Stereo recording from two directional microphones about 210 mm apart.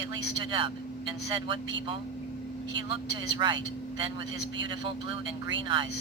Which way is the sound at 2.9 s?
20° right (ahead or behind).